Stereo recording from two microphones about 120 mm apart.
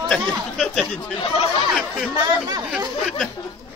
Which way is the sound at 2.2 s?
35° right (ahead or behind).